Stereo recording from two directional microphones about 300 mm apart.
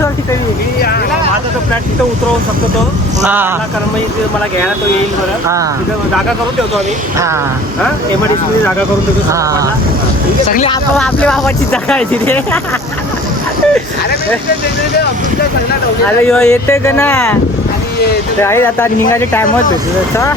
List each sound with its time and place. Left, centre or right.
3.2 s speech: centre
9.3 s speech: centre
10.5 s speech: left
10.9 s speech: centre
16.0 s speech: centre
18.4 s speech: centre